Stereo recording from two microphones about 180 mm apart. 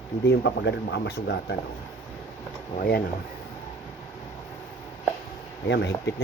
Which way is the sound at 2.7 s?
55° left (ahead or behind).